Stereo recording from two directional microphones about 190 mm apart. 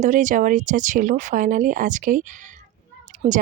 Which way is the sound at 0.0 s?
40° right (ahead or behind).